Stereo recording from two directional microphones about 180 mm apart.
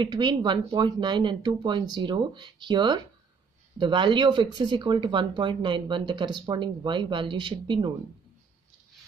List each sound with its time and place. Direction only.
0.0 s speech: 25° right (ahead or behind)